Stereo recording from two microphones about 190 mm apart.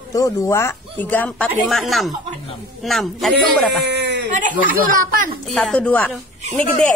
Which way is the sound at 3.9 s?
65° right (ahead or behind).